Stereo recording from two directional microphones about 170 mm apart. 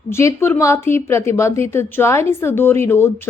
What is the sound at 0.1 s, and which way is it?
A woman's voice, 15° left (ahead or behind).